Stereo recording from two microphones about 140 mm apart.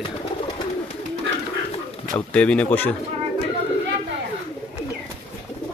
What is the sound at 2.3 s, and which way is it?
Speech, 10° left (ahead or behind).